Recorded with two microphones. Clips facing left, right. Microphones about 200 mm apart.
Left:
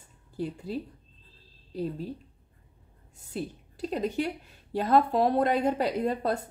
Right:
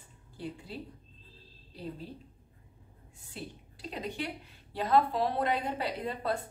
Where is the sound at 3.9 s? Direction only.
40° left (ahead or behind).